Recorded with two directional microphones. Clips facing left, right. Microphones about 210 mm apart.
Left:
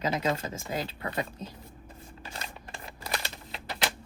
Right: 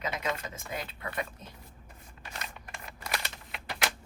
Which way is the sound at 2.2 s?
30° left (ahead or behind).